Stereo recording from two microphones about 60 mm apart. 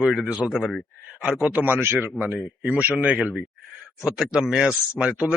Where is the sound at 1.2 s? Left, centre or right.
Centre.